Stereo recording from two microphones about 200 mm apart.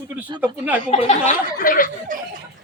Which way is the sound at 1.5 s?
45° left (ahead or behind).